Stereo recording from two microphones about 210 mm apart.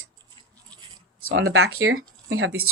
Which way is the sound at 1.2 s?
75° right (ahead or behind).